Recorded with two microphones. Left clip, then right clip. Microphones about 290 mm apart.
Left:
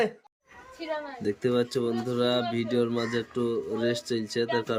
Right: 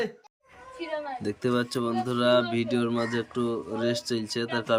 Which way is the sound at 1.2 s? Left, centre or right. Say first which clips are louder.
Left 3 dB; centre.